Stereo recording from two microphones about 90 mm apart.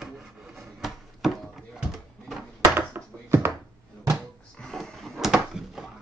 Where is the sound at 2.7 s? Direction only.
25° right (ahead or behind).